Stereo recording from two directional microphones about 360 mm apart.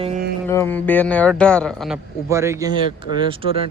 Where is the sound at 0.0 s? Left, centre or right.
Centre.